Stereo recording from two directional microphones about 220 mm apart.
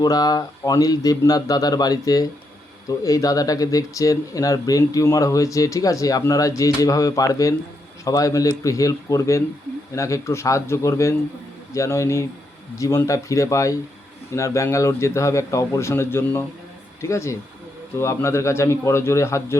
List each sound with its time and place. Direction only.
0.0 s speech: 15° left (ahead or behind)